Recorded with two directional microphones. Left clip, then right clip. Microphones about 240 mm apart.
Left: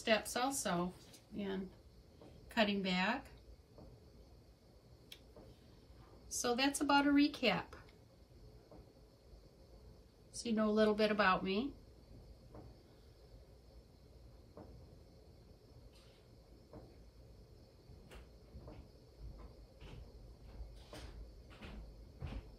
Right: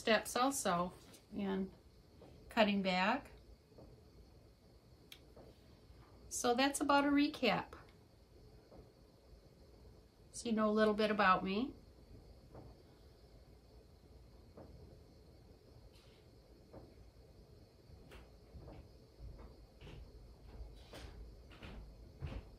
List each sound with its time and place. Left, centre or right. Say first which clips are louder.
0.0 s a woman's voice: right 1 dB; centre
6.2 s speech: right 2 dB; centre
10.3 s a woman's voice: even; centre